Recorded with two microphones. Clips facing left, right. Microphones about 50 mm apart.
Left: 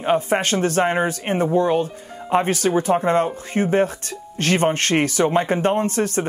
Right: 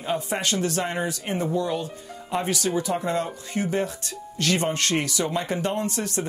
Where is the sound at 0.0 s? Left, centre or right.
Left.